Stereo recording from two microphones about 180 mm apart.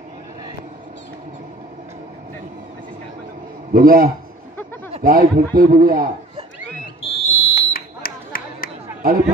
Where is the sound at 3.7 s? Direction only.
55° right (ahead or behind).